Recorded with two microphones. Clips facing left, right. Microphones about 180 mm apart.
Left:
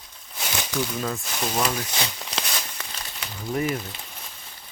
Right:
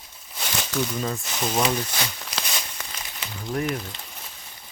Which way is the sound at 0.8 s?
Centre (ahead or behind).